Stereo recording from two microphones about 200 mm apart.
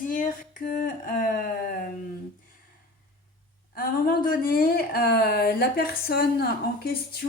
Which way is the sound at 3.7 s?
50° left (ahead or behind).